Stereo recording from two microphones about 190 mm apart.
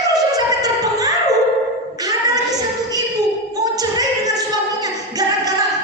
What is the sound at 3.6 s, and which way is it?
Music, 20° right (ahead or behind).